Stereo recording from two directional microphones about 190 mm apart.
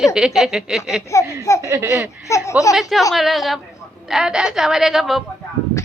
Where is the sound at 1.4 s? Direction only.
15° left (ahead or behind).